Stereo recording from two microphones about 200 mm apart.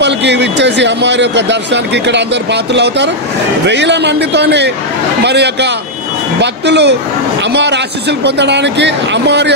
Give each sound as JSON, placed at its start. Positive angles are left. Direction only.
{"t": 0.0, "sound": "speech", "side_deg": -60}